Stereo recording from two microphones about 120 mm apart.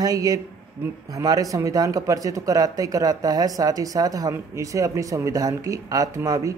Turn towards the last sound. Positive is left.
turn(degrees=-25)  # may be behind; listen again after turning